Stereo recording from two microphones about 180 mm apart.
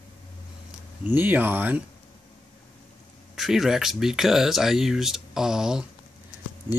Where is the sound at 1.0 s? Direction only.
10° right (ahead or behind).